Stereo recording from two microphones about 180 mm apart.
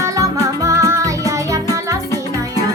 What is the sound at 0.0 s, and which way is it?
Music, 15° right (ahead or behind).